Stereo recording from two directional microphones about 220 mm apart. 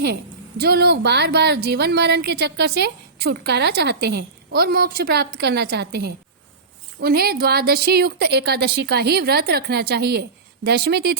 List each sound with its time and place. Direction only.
0.0 s a woman's voice: 45° right (ahead or behind)